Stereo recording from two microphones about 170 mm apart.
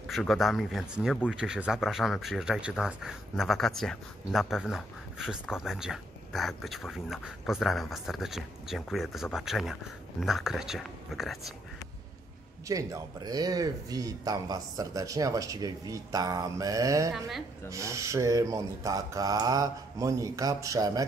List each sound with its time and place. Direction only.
0.0 s speech: centre (ahead or behind)
12.6 s speech: 20° right (ahead or behind)